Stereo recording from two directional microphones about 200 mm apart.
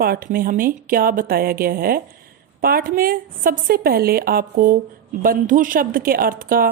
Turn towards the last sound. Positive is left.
turn(degrees=-45)  # may be behind; listen again after turning